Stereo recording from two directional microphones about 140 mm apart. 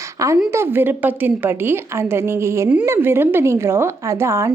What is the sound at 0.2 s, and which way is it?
A woman's voice, 25° right (ahead or behind).